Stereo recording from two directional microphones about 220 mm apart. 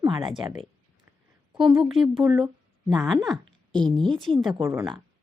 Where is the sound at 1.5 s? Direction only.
5° right (ahead or behind).